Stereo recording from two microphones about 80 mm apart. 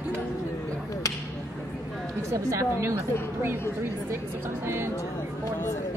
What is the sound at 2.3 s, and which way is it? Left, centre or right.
Speech, right.